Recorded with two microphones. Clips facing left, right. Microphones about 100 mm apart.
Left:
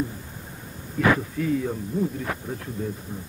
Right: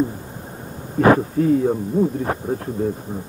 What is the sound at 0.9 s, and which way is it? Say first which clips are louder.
Speech: right 7 dB; 40° right (ahead or behind).